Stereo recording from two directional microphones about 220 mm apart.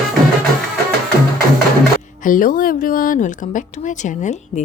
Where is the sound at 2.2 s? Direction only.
40° left (ahead or behind).